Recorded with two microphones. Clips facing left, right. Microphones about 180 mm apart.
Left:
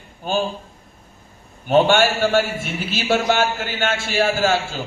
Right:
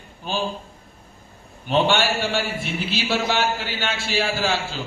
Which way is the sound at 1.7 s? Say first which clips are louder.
Left 5 dB; 45° left (ahead or behind).